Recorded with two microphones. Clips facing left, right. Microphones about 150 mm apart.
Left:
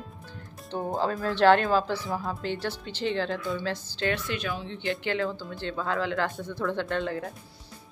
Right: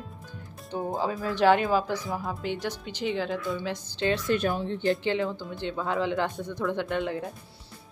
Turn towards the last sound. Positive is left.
turn(degrees=-15)  # may be behind; listen again after turning